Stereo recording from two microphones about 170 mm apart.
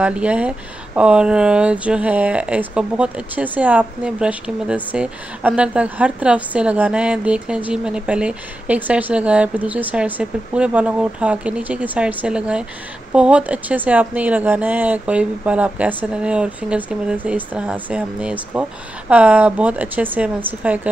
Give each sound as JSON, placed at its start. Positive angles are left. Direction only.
{"t": 0.0, "sound": "speech", "side_deg": -5}